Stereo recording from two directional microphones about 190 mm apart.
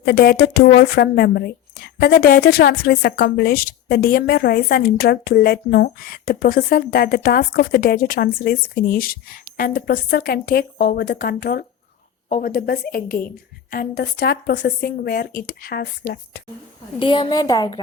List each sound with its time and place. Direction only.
0.0 s a woman's voice: 55° left (ahead or behind)
17.0 s a woman's voice: 25° left (ahead or behind)